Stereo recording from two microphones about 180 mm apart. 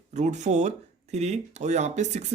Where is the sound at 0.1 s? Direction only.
40° right (ahead or behind).